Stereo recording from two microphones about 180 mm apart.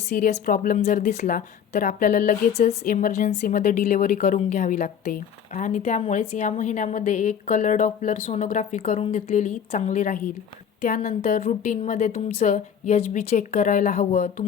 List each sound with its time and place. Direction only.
0.1 s a woman's voice: 40° left (ahead or behind)